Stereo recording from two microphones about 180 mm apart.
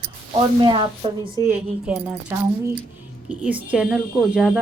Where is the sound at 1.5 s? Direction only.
5° right (ahead or behind).